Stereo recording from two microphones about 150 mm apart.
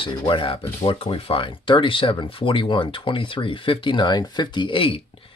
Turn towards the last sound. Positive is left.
turn(degrees=35)  # may be behind; listen again after turning